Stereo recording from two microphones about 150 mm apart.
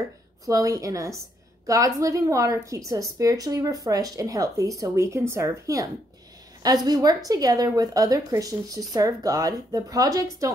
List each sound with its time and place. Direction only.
0.5 s a woman's voice: 20° right (ahead or behind)